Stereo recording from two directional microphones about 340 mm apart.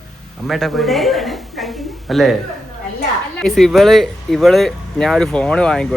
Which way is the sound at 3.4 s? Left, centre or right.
Centre.